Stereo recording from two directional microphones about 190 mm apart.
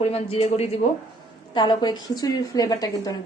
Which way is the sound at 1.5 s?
20° left (ahead or behind).